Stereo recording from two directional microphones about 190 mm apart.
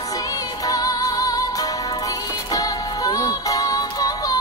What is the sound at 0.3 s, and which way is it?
Music, 20° left (ahead or behind).